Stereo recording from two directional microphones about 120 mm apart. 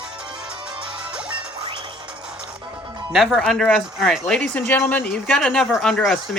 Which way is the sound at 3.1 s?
Centre (ahead or behind).